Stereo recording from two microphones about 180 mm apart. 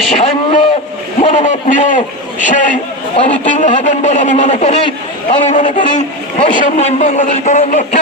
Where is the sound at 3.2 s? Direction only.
40° left (ahead or behind).